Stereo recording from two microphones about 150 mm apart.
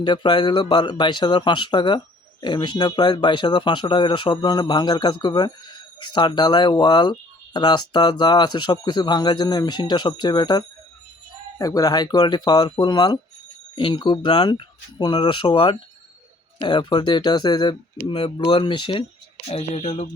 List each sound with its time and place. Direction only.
0.0 s speech: 30° left (ahead or behind)
19.5 s speech: 45° left (ahead or behind)